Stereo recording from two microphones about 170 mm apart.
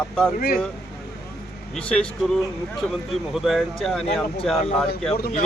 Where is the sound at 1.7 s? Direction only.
5° left (ahead or behind).